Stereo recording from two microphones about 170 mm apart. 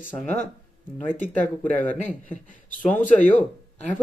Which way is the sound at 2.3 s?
50° left (ahead or behind).